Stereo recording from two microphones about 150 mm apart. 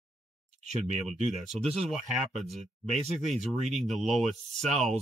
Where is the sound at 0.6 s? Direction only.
50° right (ahead or behind).